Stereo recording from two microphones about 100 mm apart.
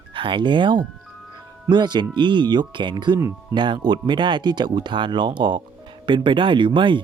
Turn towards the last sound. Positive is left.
turn(degrees=-55)  # may be behind; listen again after turning